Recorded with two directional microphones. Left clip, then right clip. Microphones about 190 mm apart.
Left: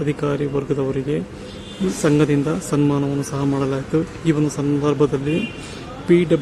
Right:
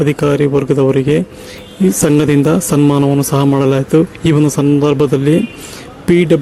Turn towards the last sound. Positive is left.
turn(degrees=-40)  # may be behind; listen again after turning